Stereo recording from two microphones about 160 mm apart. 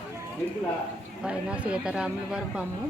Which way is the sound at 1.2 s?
5° right (ahead or behind).